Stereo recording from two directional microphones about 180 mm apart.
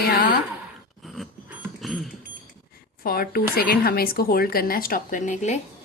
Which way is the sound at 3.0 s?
55° left (ahead or behind).